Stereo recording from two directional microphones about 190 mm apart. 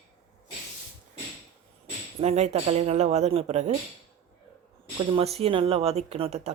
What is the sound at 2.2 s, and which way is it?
Speech, 35° right (ahead or behind).